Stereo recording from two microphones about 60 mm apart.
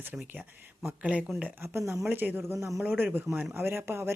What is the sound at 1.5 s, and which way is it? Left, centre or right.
Speech, right.